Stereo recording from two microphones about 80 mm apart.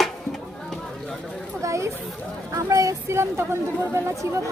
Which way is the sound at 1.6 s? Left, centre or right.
Right.